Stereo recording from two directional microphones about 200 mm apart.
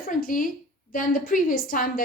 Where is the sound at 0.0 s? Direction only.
45° left (ahead or behind).